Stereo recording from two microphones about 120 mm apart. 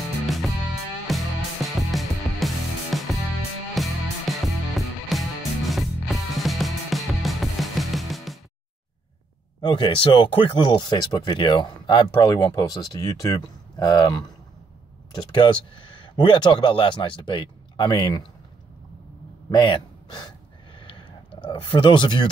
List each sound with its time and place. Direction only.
1.0 s music: centre (ahead or behind)
9.6 s speech: 40° left (ahead or behind)
19.5 s speech: 40° left (ahead or behind)
20.8 s a sound: 50° left (ahead or behind)